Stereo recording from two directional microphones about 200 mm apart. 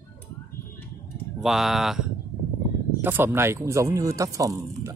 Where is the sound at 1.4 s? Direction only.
Centre (ahead or behind).